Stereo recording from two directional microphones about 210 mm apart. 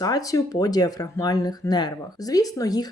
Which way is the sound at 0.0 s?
15° left (ahead or behind).